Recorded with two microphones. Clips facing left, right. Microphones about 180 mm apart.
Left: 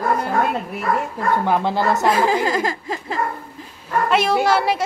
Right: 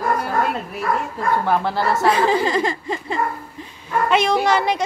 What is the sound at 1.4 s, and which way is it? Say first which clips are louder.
Speech: left 2 dB; 20° left (ahead or behind).